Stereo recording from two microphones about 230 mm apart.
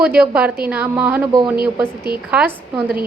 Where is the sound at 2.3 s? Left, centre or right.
Centre.